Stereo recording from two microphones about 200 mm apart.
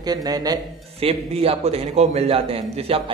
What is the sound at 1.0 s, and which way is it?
Speech, 30° right (ahead or behind).